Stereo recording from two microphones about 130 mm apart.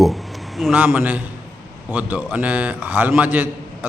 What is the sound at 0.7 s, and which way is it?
A man's voice, 15° right (ahead or behind).